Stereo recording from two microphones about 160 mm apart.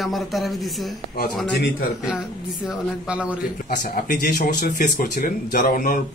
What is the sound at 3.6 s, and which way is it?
Speech, 60° left (ahead or behind).